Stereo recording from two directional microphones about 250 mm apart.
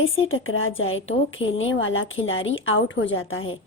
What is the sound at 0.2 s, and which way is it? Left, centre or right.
A woman's voice, left.